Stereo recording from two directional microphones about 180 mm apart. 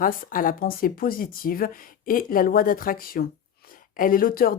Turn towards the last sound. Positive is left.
turn(degrees=55)  # may be behind; listen again after turning